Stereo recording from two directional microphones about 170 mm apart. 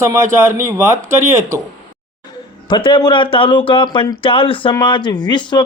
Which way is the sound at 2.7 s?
25° left (ahead or behind).